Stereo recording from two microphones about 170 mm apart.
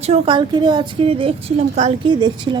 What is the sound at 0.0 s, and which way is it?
A woman's voice, 35° right (ahead or behind).